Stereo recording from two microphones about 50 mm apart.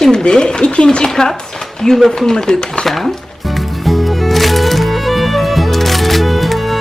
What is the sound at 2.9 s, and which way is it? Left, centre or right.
Music, centre.